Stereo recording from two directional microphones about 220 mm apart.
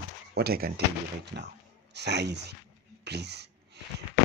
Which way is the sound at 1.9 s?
50° right (ahead or behind).